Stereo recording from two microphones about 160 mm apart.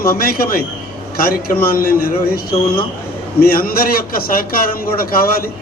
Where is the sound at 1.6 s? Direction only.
65° left (ahead or behind).